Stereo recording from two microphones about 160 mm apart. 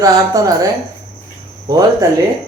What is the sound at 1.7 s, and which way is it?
Speech, 20° right (ahead or behind).